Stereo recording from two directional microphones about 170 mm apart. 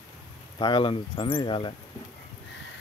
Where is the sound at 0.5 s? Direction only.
30° left (ahead or behind).